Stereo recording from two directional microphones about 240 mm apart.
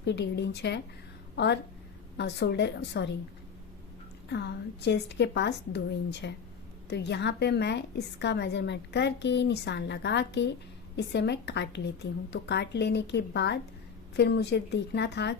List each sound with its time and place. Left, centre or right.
0.0 s a woman's voice: left
4.3 s a woman's voice: left